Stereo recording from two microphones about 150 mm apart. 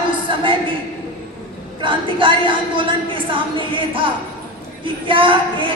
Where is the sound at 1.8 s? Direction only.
35° right (ahead or behind).